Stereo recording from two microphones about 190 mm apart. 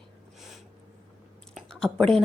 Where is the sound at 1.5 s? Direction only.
5° left (ahead or behind).